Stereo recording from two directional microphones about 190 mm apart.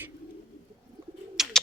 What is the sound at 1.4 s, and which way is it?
Bird, centre (ahead or behind).